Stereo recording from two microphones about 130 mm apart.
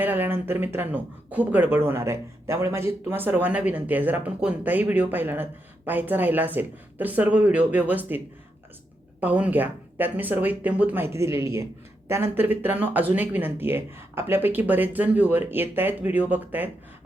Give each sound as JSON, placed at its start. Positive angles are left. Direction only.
{"t": 0.0, "sound": "speech", "side_deg": -15}
{"t": 9.2, "sound": "speech", "side_deg": -10}